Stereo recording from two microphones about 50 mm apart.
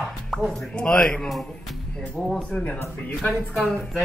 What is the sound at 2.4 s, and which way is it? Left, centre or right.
Speech, left.